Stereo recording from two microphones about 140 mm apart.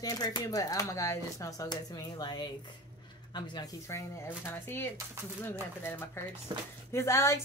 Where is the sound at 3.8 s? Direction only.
20° left (ahead or behind).